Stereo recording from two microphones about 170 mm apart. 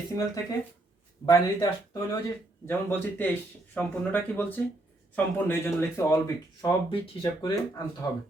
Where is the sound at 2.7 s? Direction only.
10° left (ahead or behind); by 7.5 s 25° left (ahead or behind).